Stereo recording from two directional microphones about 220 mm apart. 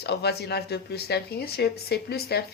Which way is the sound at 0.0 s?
50° left (ahead or behind).